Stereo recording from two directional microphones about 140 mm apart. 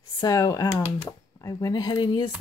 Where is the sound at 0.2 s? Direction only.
30° left (ahead or behind).